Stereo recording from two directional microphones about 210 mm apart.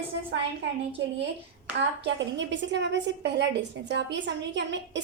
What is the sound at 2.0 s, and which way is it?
A woman's voice, 60° right (ahead or behind).